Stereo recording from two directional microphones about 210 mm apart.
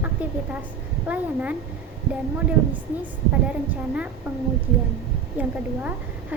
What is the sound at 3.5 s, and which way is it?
Speech, 5° right (ahead or behind).